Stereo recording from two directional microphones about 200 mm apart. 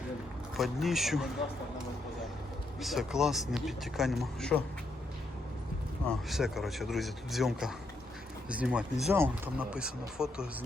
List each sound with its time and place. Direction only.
0.5 s speech: centre (ahead or behind)
2.8 s speech: centre (ahead or behind)
6.1 s speech: centre (ahead or behind)